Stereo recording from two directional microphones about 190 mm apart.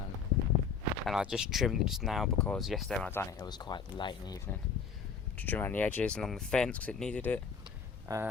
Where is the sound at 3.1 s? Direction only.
15° left (ahead or behind).